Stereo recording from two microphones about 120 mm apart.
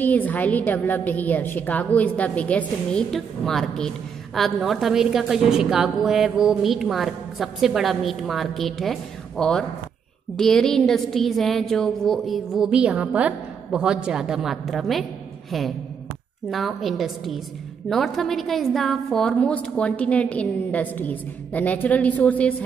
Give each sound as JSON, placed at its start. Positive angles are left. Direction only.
{"t": 0.0, "sound": "a woman's voice", "side_deg": 15}
{"t": 16.4, "sound": "a woman's voice", "side_deg": 0}